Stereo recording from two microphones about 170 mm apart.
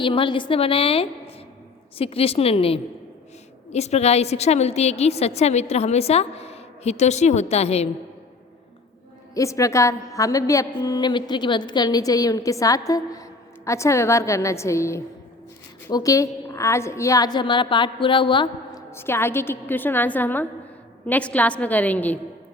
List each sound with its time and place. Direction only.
0.0 s a woman's voice: 30° left (ahead or behind)
9.3 s a woman's voice: 20° left (ahead or behind)
18.9 s a woman's voice: 15° left (ahead or behind)